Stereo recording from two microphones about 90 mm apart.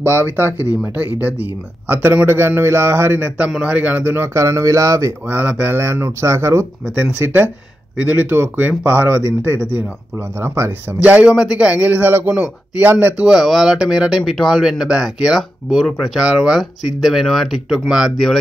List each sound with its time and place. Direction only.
1.2 s a man's voice: 15° right (ahead or behind)
3.3 s a man's voice: 10° right (ahead or behind); by 5.1 s 35° right (ahead or behind)
5.3 s a man's voice: 15° right (ahead or behind)
5.8 s speech: 30° right (ahead or behind)
8.0 s a man's voice: 20° right (ahead or behind)
11.0 s a man's voice: 15° right (ahead or behind)
13.2 s speech: 5° right (ahead or behind)